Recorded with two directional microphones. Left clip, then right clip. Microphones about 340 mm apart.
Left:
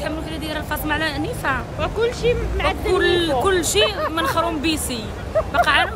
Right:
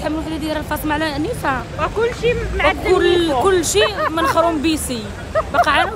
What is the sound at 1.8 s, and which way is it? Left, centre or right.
Speech, centre.